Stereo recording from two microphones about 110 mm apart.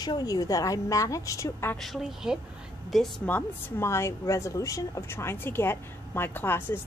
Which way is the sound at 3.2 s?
20° left (ahead or behind).